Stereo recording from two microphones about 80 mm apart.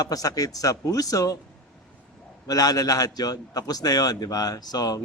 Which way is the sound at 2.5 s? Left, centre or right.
Left.